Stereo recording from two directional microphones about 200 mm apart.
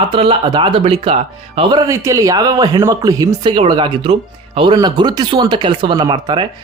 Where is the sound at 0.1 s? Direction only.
30° right (ahead or behind).